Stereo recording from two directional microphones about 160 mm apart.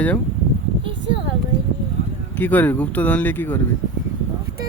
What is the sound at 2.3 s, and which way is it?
Speech, 10° left (ahead or behind).